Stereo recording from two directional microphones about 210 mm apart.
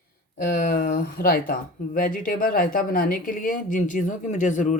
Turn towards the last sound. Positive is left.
turn(degrees=35)  # may be behind; listen again after turning